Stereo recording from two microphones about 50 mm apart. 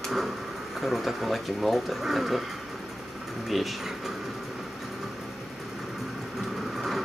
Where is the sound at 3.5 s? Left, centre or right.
Centre.